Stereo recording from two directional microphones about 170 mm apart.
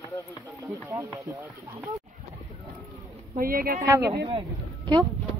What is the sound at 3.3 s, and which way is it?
Speech, 60° right (ahead or behind).